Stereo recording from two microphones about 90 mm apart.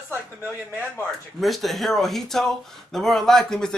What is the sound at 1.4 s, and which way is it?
Speech, centre (ahead or behind).